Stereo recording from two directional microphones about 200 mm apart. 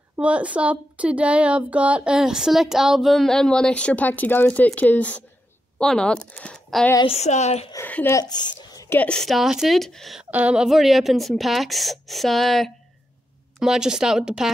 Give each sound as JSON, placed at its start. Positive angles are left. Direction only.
{"t": 0.1, "sound": "a woman's voice", "side_deg": -5}
{"t": 7.1, "sound": "a sound", "side_deg": 35}
{"t": 7.7, "sound": "a woman's voice", "side_deg": 10}